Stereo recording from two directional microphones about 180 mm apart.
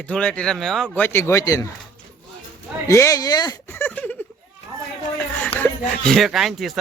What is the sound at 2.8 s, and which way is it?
Speech, 15° left (ahead or behind).